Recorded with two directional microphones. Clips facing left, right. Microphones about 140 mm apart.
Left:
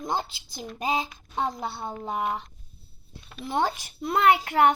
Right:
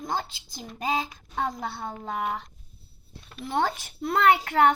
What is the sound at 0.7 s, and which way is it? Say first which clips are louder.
A child's voice: even; 15° left (ahead or behind).